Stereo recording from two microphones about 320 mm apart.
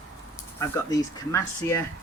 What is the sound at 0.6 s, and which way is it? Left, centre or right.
Speech, centre.